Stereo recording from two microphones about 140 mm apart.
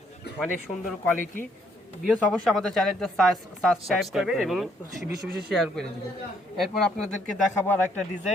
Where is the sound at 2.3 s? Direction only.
5° left (ahead or behind).